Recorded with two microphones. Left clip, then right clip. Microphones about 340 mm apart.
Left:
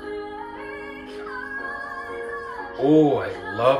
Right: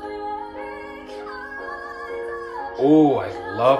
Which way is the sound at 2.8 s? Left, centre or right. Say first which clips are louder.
Right 2 dB; right.